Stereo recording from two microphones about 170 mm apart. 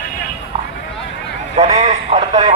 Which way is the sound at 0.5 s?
35° right (ahead or behind).